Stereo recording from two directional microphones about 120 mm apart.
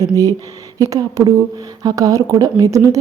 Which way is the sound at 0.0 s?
30° right (ahead or behind).